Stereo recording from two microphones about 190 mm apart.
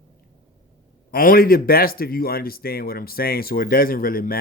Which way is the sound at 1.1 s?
50° left (ahead or behind).